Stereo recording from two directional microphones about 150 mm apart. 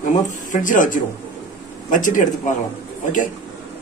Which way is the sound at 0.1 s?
55° left (ahead or behind).